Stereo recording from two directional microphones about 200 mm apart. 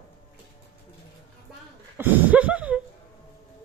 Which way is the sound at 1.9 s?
10° right (ahead or behind).